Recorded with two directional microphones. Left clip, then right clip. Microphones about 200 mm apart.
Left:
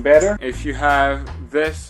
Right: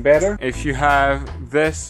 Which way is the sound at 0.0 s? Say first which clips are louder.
Left 2 dB; 45° right (ahead or behind).